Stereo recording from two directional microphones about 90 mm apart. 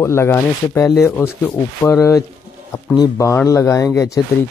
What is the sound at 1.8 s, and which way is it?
Speech, 35° left (ahead or behind).